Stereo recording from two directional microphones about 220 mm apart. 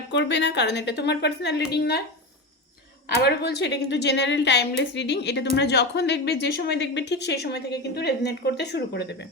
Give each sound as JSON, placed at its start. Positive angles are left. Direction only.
{"t": 0.1, "sound": "a woman's voice", "side_deg": 50}
{"t": 3.2, "sound": "a woman's voice", "side_deg": 50}